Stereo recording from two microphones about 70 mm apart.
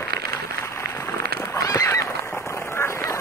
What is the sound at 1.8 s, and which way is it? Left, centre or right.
Honk, left.